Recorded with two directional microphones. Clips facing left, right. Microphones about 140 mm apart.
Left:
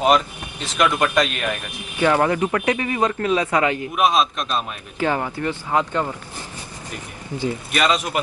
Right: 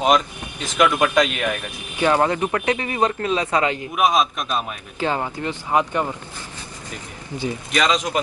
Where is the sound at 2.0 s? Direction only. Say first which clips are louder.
Left 1 dB; 25° right (ahead or behind).